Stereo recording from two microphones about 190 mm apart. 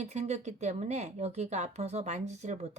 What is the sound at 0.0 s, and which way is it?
Speech, 35° right (ahead or behind).